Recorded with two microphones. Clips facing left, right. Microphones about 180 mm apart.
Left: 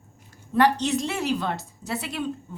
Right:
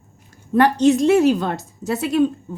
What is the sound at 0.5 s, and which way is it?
A woman's voice, 50° right (ahead or behind).